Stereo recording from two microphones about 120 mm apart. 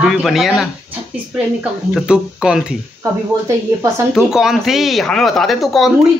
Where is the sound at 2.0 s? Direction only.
5° right (ahead or behind).